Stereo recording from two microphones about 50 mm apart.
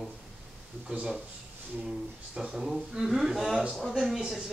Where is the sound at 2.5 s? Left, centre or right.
Centre.